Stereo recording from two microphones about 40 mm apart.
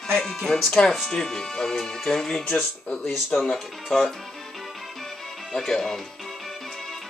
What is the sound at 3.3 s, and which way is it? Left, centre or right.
Speech, left.